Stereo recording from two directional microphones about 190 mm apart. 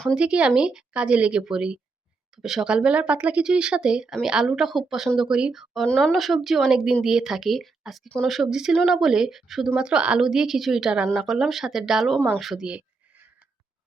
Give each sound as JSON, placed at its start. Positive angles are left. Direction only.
{"t": 0.0, "sound": "speech", "side_deg": -5}